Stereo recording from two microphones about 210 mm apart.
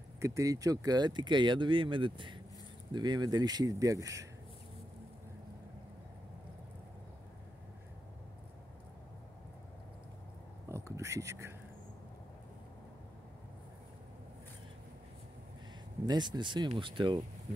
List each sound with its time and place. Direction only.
0.2 s speech: 15° right (ahead or behind)
10.7 s a sound: 15° right (ahead or behind)
16.1 s speech: 20° right (ahead or behind)